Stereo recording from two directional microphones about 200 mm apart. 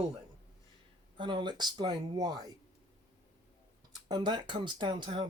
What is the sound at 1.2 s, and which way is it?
Speech, 25° right (ahead or behind).